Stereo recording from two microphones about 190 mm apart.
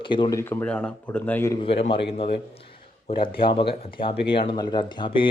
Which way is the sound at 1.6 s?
30° left (ahead or behind).